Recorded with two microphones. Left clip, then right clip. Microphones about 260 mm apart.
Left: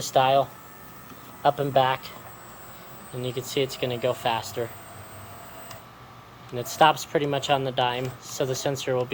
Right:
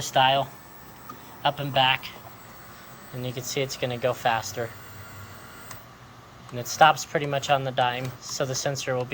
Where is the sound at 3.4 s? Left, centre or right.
Centre.